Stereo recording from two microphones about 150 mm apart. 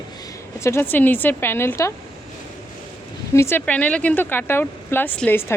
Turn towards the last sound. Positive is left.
turn(degrees=15)  # may be behind; listen again after turning